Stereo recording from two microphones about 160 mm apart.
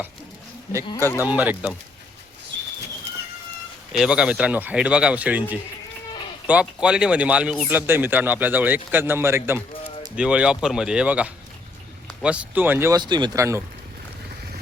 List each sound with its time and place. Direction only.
1.2 s a man's voice: 10° right (ahead or behind)
3.9 s a man's voice: 5° right (ahead or behind)
13.0 s speech: 30° right (ahead or behind)